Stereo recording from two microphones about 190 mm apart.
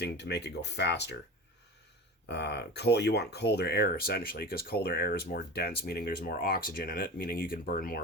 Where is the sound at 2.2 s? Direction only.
65° left (ahead or behind).